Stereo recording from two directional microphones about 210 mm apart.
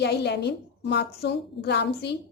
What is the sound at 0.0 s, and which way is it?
A woman's voice, 50° left (ahead or behind).